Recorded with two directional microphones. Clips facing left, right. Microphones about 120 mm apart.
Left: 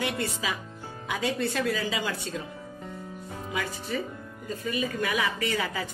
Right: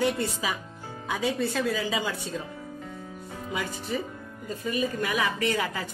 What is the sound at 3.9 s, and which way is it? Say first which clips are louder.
Speech: right 1 dB; 20° right (ahead or behind).